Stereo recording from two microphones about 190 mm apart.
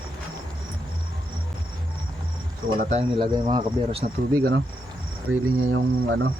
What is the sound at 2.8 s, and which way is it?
Speech, 35° right (ahead or behind).